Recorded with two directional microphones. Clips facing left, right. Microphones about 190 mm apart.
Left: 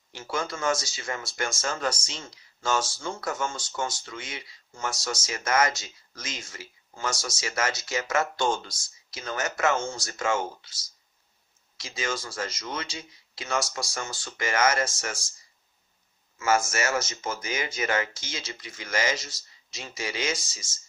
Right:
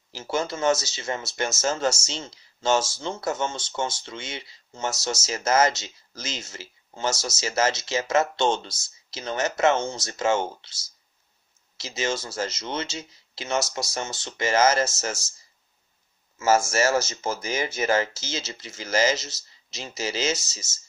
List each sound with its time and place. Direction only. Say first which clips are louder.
0.1 s speech: right 4 dB; 25° right (ahead or behind)
16.3 s speech: right 4 dB; 30° right (ahead or behind)